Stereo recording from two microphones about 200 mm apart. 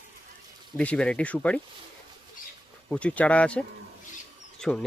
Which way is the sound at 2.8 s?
5° left (ahead or behind).